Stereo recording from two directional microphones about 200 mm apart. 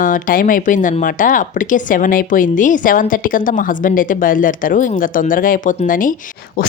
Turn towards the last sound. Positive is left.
turn(degrees=45)  # may be behind; listen again after turning